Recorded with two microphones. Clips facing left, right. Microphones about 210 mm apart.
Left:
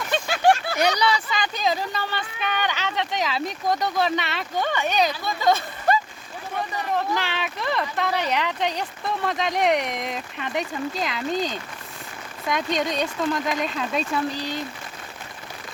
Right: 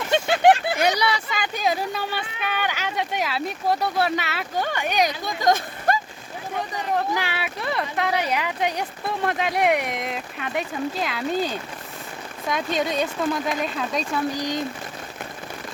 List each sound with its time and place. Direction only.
0.1 s a sound: 25° right (ahead or behind)
0.8 s speech: 5° right (ahead or behind)
6.7 s speech: 10° right (ahead or behind)
14.3 s speech: 15° right (ahead or behind)